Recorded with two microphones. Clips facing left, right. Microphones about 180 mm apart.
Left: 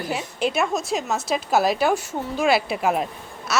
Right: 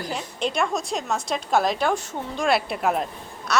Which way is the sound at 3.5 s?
5° left (ahead or behind).